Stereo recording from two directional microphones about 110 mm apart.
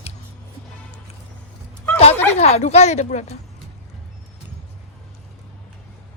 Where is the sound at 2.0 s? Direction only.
75° left (ahead or behind).